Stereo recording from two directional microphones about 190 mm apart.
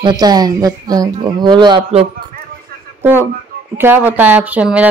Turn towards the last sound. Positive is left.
turn(degrees=-5)  # may be behind; listen again after turning